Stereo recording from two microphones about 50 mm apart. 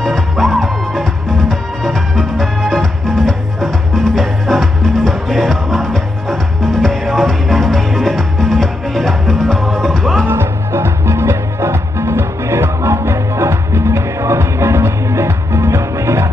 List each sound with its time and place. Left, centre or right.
0.0 s music: centre
10.2 s music: right